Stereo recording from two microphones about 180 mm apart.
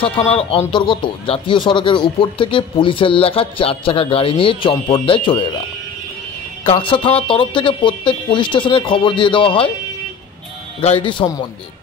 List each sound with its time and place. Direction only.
0.0 s speech: 30° left (ahead or behind)
6.6 s speech: 30° left (ahead or behind)
10.8 s speech: 30° left (ahead or behind)